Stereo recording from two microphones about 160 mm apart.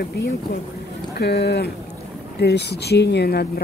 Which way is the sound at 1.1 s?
85° left.